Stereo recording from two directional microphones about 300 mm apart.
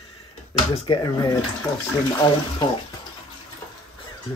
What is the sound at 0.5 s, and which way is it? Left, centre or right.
Speech, centre.